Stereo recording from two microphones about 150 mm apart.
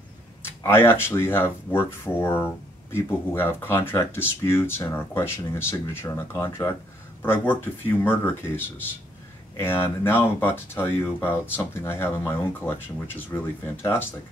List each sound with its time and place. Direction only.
0.4 s speech: 15° left (ahead or behind)